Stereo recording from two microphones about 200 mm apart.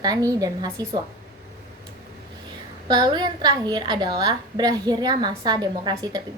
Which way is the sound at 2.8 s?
20° right (ahead or behind).